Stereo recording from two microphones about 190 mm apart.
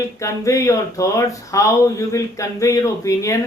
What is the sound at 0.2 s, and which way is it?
Speech, 15° left (ahead or behind).